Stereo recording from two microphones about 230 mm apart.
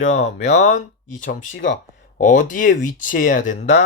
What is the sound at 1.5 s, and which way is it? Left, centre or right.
Speech, left.